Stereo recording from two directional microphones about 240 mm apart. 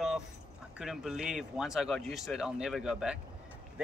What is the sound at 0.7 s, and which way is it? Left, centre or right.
Speech, centre.